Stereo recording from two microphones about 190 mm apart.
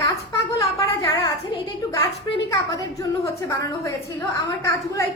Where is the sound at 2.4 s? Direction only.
15° left (ahead or behind).